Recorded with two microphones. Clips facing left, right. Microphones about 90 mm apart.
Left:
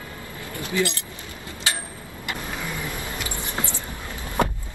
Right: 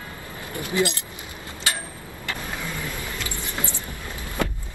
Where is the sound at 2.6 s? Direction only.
15° left (ahead or behind).